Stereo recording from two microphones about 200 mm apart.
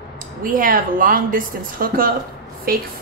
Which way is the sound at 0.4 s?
45° right (ahead or behind).